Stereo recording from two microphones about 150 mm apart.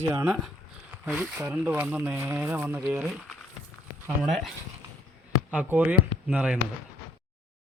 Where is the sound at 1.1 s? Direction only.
5° right (ahead or behind).